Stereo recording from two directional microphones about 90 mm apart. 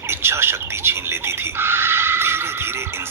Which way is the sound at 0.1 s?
25° right (ahead or behind).